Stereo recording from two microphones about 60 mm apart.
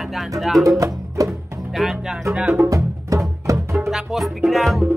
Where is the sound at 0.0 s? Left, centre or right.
Centre.